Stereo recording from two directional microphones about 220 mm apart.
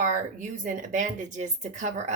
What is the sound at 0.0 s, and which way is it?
Speech, 35° right (ahead or behind).